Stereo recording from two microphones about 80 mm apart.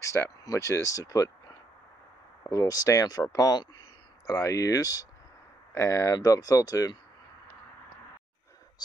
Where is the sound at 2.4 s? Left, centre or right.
Left.